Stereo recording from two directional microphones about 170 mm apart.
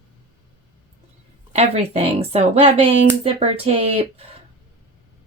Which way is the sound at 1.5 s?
40° right (ahead or behind).